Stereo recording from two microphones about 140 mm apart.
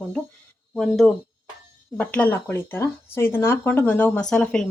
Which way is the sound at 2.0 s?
10° left (ahead or behind).